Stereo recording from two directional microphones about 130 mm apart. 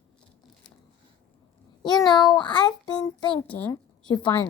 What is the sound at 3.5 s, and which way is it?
Speech, 10° left (ahead or behind).